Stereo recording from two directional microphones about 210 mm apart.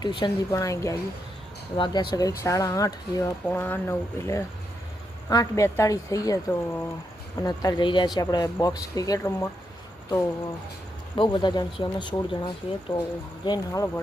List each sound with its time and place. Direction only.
0.0 s speech: 20° left (ahead or behind)
11.1 s speech: 20° left (ahead or behind)